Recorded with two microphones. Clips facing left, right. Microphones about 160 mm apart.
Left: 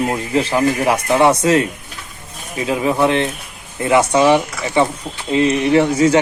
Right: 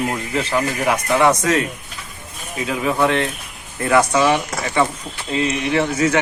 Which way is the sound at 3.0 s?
20° left (ahead or behind).